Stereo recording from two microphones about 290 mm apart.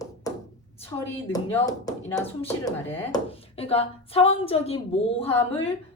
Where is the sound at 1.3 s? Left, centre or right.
Centre.